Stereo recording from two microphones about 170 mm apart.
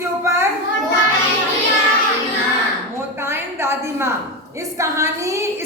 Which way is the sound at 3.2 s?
15° right (ahead or behind).